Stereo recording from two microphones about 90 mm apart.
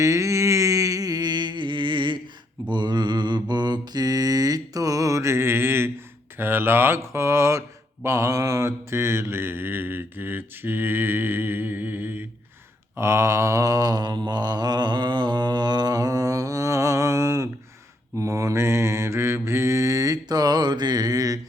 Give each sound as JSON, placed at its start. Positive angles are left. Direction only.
{"t": 0.0, "sound": "a sound", "side_deg": -35}
{"t": 2.6, "sound": "mantra", "side_deg": -60}
{"t": 6.3, "sound": "speech", "side_deg": -25}
{"t": 8.0, "sound": "mantra", "side_deg": -30}